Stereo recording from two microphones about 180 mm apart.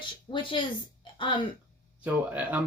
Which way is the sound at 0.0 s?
25° left (ahead or behind).